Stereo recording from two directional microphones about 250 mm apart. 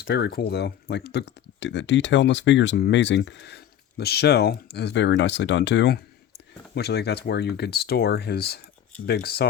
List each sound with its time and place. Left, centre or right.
0.0 s speech: left